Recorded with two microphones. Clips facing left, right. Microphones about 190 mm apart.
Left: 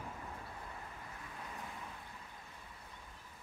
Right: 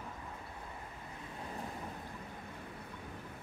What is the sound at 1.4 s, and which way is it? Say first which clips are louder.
Vehicle: right 6 dB; 35° right (ahead or behind).